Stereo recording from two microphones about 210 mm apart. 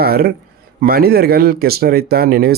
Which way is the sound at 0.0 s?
45° right (ahead or behind).